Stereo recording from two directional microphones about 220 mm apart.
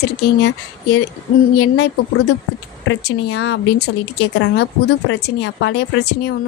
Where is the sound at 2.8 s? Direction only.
60° left (ahead or behind).